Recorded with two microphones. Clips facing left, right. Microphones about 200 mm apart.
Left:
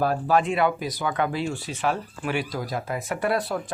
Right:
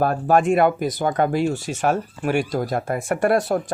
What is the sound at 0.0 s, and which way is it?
Speech, 50° right (ahead or behind).